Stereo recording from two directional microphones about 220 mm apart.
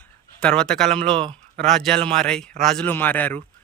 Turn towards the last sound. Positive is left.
turn(degrees=5)  # may be behind; listen again after turning